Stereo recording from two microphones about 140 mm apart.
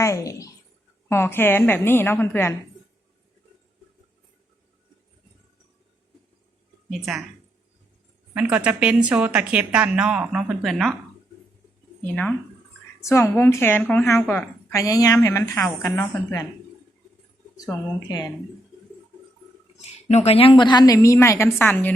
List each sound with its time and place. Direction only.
0.0 s a woman's voice: 20° left (ahead or behind)
7.0 s a woman's voice: centre (ahead or behind)
8.3 s a woman's voice: 10° right (ahead or behind)
12.0 s a woman's voice: 10° left (ahead or behind)
14.7 s a woman's voice: 25° left (ahead or behind)
17.6 s a woman's voice: 25° left (ahead or behind)
19.8 s a woman's voice: 50° left (ahead or behind); by 21.9 s 15° left (ahead or behind)